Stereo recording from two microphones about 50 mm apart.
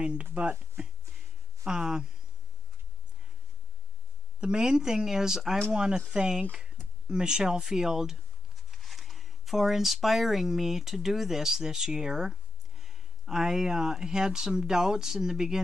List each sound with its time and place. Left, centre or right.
0.0 s speech: right
0.3 s speech: right
1.6 s speech: centre
4.4 s speech: centre